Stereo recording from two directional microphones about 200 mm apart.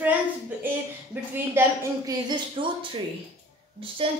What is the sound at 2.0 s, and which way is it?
Speech, 25° right (ahead or behind).